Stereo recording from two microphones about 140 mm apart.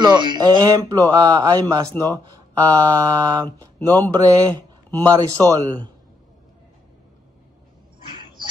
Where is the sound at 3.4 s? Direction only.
25° right (ahead or behind).